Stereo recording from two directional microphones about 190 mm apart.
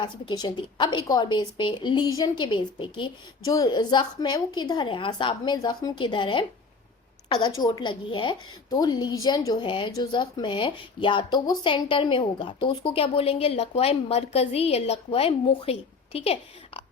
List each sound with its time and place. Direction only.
0.0 s a woman's voice: 20° left (ahead or behind)
7.6 s a woman's voice: 25° left (ahead or behind)